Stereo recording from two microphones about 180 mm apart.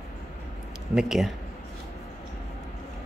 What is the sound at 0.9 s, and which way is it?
Speech, centre (ahead or behind).